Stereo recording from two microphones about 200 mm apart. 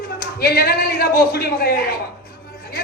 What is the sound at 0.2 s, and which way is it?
A man's voice, 50° left (ahead or behind).